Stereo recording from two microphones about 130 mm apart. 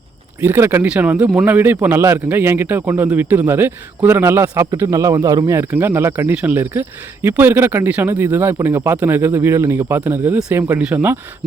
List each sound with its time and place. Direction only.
0.4 s speech: 20° right (ahead or behind)
0.9 s a man's voice: 10° right (ahead or behind)